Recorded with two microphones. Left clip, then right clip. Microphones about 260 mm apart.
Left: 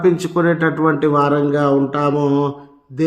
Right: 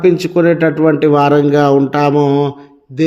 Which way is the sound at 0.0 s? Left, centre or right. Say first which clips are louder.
Right 5 dB; centre.